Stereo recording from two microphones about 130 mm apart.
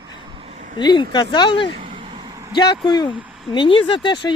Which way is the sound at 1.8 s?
40° right (ahead or behind).